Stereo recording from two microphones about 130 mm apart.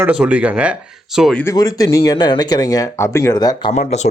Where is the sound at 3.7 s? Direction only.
60° left (ahead or behind).